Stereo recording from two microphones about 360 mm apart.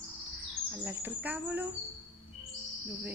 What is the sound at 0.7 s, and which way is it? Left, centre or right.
A woman's voice, centre.